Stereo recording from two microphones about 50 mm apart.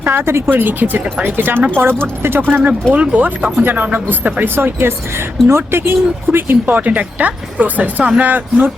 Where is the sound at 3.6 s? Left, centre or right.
Right.